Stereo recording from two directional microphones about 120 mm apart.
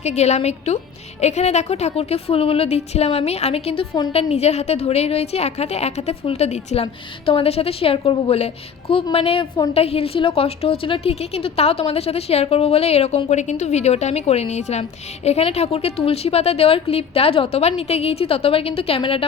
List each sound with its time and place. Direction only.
0.0 s a woman's voice: 70° left (ahead or behind)
6.8 s a woman's voice: 50° left (ahead or behind)